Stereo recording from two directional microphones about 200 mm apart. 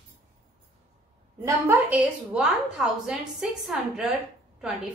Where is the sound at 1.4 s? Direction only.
10° right (ahead or behind).